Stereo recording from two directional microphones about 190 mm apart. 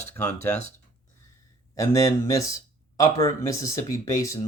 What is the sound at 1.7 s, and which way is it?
Speech, 15° left (ahead or behind).